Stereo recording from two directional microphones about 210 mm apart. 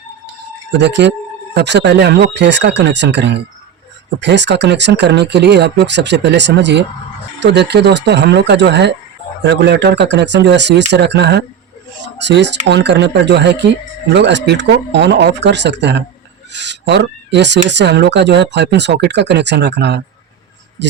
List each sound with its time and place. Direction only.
0.8 s speech: 55° right (ahead or behind)